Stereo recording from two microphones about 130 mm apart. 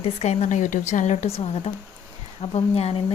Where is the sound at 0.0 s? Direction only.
55° left (ahead or behind).